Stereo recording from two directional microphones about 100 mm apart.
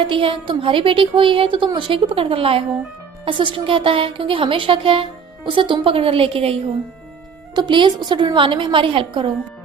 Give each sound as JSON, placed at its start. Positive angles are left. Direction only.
{"t": 0.1, "sound": "a woman's voice", "side_deg": -60}
{"t": 3.2, "sound": "a woman's voice", "side_deg": -60}
{"t": 7.5, "sound": "a woman's voice", "side_deg": -50}